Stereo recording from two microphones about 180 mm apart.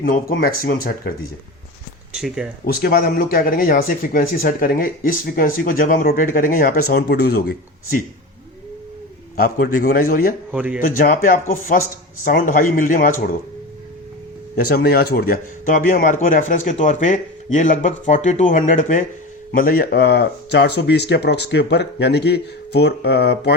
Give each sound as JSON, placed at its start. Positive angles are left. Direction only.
{"t": 0.0, "sound": "speech", "side_deg": 55}
{"t": 2.1, "sound": "speech", "side_deg": -5}
{"t": 2.6, "sound": "speech", "side_deg": 55}
{"t": 9.3, "sound": "a man's voice", "side_deg": 55}
{"t": 10.5, "sound": "speech", "side_deg": -10}
{"t": 10.8, "sound": "speech", "side_deg": 50}
{"t": 14.5, "sound": "speech", "side_deg": 60}